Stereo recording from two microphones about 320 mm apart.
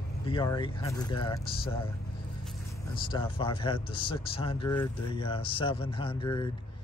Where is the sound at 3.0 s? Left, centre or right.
Centre.